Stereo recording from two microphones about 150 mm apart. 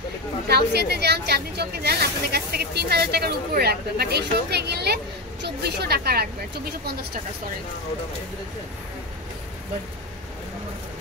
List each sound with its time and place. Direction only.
0.5 s speech: 90° right